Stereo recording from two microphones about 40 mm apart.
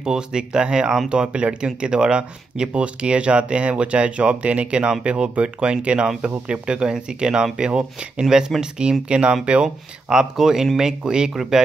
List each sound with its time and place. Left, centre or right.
0.0 s speech: centre